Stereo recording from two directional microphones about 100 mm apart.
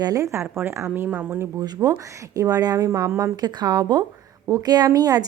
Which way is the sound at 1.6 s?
35° right (ahead or behind).